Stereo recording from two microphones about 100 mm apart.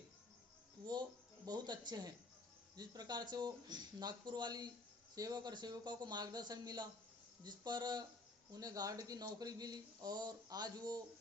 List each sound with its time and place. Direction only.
1.5 s speech: 45° right (ahead or behind)